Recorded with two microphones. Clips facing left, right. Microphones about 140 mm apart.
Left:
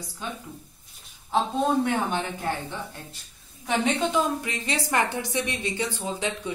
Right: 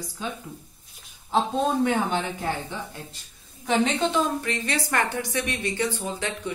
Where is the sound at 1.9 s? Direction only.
5° right (ahead or behind); by 6.5 s 15° left (ahead or behind).